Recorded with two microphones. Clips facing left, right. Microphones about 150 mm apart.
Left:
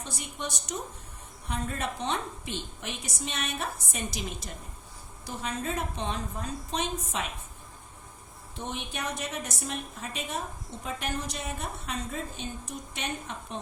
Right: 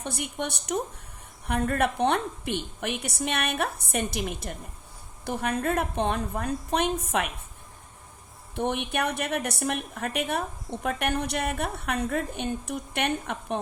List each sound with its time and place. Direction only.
0.0 s a woman's voice: 60° right (ahead or behind)
8.5 s a woman's voice: 60° right (ahead or behind)